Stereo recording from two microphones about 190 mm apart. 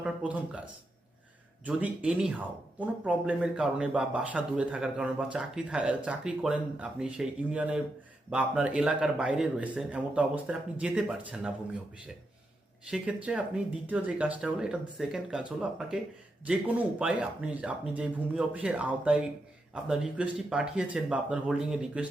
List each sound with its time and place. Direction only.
0.0 s speech: 5° right (ahead or behind)
1.6 s speech: 5° right (ahead or behind)
12.9 s speech: 5° right (ahead or behind)